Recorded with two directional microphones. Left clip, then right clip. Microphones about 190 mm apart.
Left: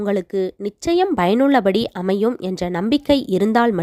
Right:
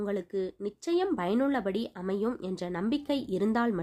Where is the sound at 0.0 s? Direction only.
45° left (ahead or behind).